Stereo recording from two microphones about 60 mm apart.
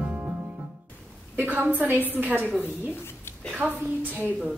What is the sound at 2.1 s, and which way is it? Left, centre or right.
Speech, right.